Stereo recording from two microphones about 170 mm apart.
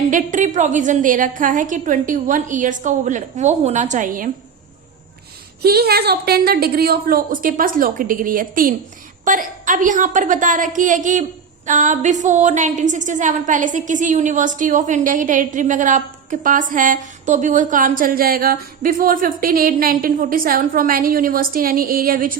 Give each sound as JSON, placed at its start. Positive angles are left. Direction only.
{"t": 0.1, "sound": "a woman's voice", "side_deg": -50}
{"t": 5.6, "sound": "a woman's voice", "side_deg": -70}